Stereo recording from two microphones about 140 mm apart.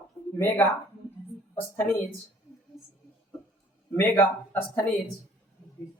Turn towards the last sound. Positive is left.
turn(degrees=15)  # may be behind; listen again after turning